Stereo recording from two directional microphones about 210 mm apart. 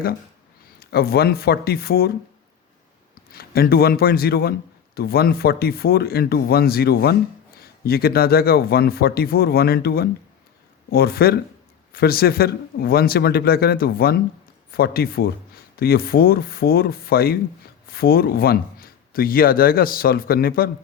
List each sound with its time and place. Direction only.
0.8 s a man's voice: 50° left (ahead or behind)
3.3 s a man's voice: 45° left (ahead or behind)